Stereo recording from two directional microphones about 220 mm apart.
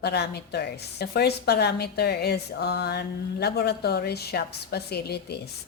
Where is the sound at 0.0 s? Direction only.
50° left (ahead or behind).